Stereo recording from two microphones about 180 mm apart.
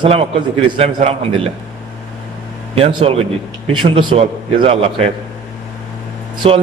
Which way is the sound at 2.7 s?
35° right (ahead or behind).